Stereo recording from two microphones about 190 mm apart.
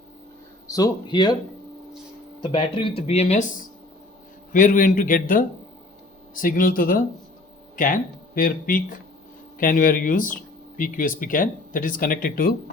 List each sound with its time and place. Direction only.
0.7 s speech: 20° left (ahead or behind)
2.4 s speech: 25° left (ahead or behind); by 12.5 s 50° left (ahead or behind)